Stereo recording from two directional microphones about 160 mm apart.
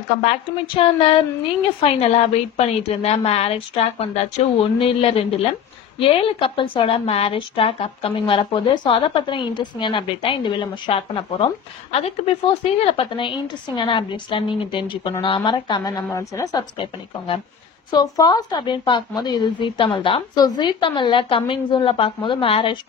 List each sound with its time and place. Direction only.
0.2 s a woman's voice: 35° left (ahead or behind); by 16.6 s 20° left (ahead or behind)
16.7 s a woman's voice: 30° left (ahead or behind)